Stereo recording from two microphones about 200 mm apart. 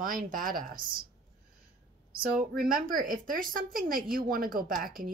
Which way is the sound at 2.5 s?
45° right (ahead or behind).